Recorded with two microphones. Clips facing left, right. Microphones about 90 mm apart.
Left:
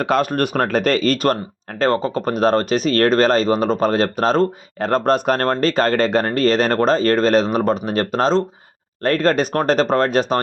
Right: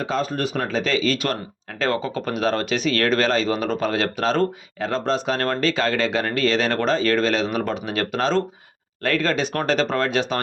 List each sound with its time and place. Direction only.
0.0 s speech: 65° left (ahead or behind); by 10.4 s 40° left (ahead or behind)